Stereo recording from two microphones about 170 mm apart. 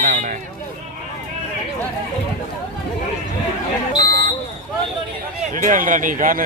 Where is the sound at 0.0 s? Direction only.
50° right (ahead or behind).